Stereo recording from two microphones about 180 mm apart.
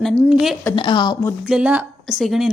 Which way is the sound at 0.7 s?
25° left (ahead or behind).